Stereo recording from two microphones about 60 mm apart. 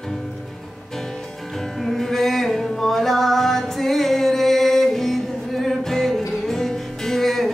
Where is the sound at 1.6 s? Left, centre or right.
Centre.